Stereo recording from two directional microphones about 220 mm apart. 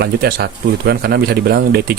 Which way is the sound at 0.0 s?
45° right (ahead or behind).